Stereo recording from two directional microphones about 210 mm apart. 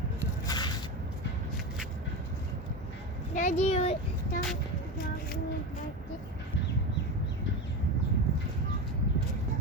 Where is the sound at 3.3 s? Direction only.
35° left (ahead or behind).